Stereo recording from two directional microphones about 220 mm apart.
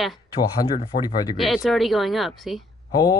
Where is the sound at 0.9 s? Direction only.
40° left (ahead or behind).